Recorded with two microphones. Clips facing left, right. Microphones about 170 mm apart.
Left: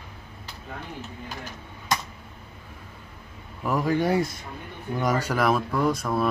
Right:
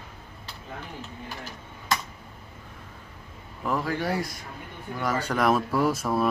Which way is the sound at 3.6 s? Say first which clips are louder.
Left 4 dB; 15° left (ahead or behind).